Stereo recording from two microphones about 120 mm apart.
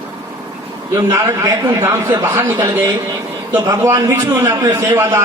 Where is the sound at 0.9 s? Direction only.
25° right (ahead or behind).